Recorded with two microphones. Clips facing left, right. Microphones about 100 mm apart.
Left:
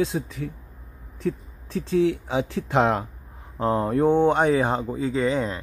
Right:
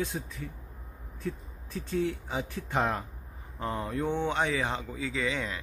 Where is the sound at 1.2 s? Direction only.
85° left.